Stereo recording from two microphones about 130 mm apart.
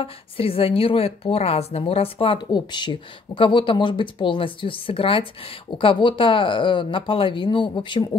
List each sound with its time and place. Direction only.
0.0 s a woman's voice: 45° left (ahead or behind)